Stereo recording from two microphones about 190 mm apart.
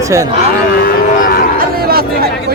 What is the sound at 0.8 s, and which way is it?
Cattle, 50° left (ahead or behind).